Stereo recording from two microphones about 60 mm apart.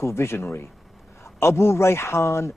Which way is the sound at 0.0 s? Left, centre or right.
Left.